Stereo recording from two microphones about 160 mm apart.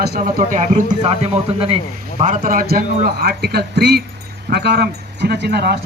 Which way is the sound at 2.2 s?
60° right (ahead or behind).